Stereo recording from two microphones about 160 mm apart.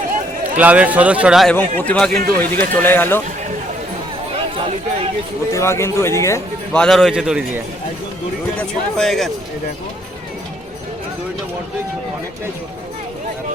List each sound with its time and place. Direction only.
0.4 s a man's voice: 10° right (ahead or behind)
1.5 s speech: 10° left (ahead or behind)
2.1 s a man's voice: 65° right (ahead or behind)
2.4 s speech: 10° left (ahead or behind)
4.5 s speech: 35° right (ahead or behind)
5.5 s speech: 15° left (ahead or behind)
6.7 s a man's voice: centre (ahead or behind)
9.0 s a man's voice: centre (ahead or behind)